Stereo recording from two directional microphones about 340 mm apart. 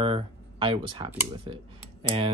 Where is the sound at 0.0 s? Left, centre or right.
Centre.